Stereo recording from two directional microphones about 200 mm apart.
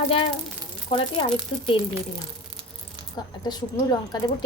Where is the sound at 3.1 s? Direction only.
20° left (ahead or behind).